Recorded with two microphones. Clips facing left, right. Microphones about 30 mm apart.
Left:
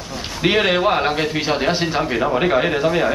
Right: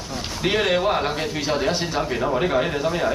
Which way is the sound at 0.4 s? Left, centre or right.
Left.